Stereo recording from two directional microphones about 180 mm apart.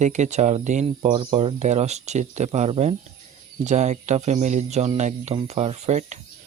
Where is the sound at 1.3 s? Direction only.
40° right (ahead or behind).